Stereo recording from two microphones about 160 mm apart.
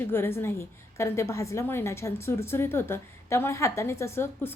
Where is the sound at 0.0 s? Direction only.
15° left (ahead or behind).